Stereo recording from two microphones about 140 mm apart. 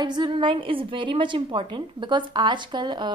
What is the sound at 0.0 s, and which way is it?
A woman's voice, 35° right (ahead or behind).